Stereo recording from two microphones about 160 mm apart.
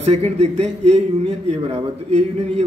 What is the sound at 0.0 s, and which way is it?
A man's voice, 40° right (ahead or behind).